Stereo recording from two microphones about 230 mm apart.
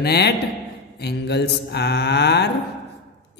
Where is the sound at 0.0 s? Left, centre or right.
Left.